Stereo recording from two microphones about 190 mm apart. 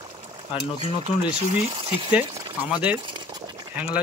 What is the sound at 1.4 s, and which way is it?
Speech, 30° right (ahead or behind).